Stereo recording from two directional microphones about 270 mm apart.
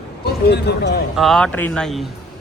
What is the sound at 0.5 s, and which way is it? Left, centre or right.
Speech, left.